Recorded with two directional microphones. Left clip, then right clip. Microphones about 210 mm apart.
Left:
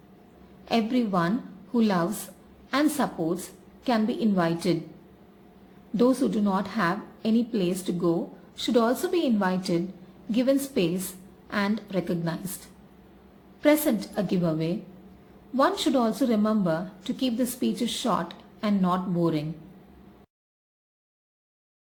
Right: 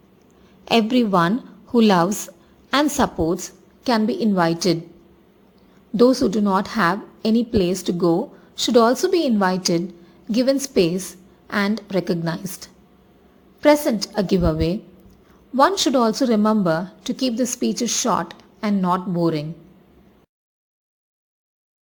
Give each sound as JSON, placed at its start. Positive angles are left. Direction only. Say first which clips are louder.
{"t": 0.6, "sound": "a woman's voice", "louder": "right 8 dB", "side_deg": -35}
{"t": 6.0, "sound": "a woman's voice", "louder": "right 7 dB", "side_deg": -25}
{"t": 13.6, "sound": "a woman's voice", "louder": "right 6 dB", "side_deg": -25}